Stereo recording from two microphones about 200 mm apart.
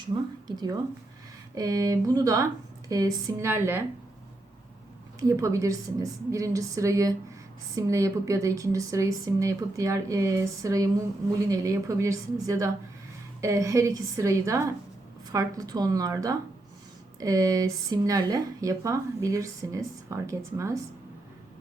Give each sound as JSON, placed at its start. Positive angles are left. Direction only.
{"t": 0.4, "sound": "speech", "side_deg": -20}
{"t": 5.3, "sound": "speech", "side_deg": -15}